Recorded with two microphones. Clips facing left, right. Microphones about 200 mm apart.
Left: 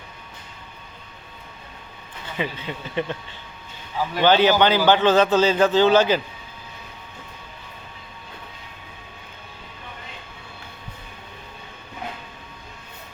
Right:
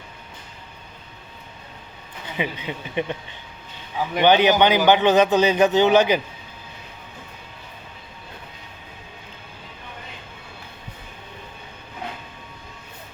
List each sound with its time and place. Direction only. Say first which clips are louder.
2.4 s a man's voice: right 1 dB; 15° right (ahead or behind)